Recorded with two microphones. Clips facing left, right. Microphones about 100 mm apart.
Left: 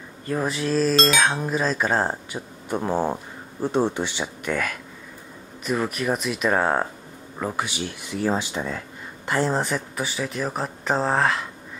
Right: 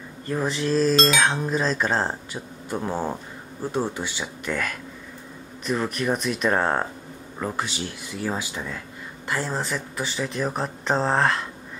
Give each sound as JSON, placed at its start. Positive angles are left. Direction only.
{"t": 0.3, "sound": "speech", "side_deg": 5}